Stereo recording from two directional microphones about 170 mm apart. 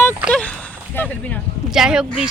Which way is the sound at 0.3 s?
10° left (ahead or behind).